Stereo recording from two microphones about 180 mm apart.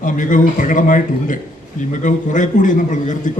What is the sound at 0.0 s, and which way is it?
A man's voice, 45° left (ahead or behind).